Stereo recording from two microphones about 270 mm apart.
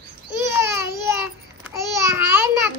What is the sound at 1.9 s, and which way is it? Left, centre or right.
Babbling, centre.